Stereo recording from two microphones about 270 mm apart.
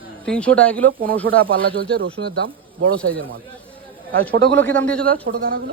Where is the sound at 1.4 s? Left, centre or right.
Right.